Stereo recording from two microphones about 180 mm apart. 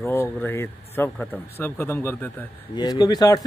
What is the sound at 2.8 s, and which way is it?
Speech, 25° left (ahead or behind).